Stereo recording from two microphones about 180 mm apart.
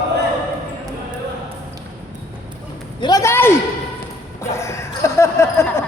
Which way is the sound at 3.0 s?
20° left (ahead or behind).